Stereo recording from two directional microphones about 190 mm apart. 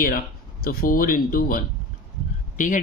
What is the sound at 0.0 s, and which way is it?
Speech, 50° left (ahead or behind).